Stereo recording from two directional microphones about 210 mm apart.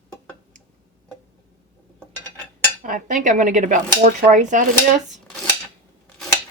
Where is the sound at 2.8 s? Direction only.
40° right (ahead or behind).